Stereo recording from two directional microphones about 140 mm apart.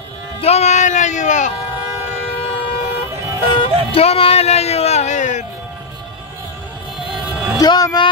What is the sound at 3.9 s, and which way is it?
Music, 45° left (ahead or behind).